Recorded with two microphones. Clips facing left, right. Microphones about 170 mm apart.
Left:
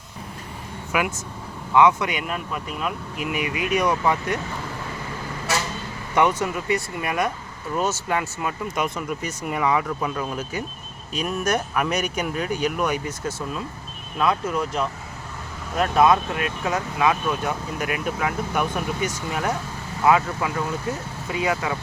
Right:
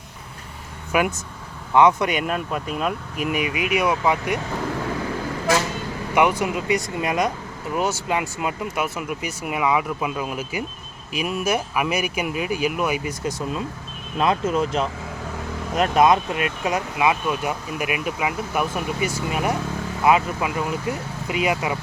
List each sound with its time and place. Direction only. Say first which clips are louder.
2.0 s speech: right 4 dB; 35° right (ahead or behind)
3.4 s speech: left 1 dB; 15° right (ahead or behind)
6.1 s speech: right 1 dB; 10° right (ahead or behind)